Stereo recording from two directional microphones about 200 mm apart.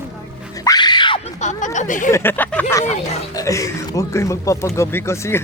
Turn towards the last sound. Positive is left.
turn(degrees=15)  # may be behind; listen again after turning